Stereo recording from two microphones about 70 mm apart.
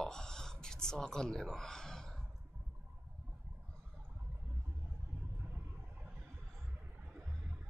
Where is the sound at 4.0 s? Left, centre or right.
Right.